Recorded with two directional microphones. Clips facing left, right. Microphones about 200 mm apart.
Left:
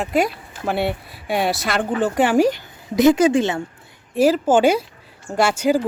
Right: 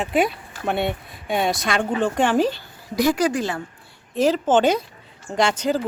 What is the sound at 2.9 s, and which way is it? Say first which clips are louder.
Speech: left 6 dB; 20° left (ahead or behind).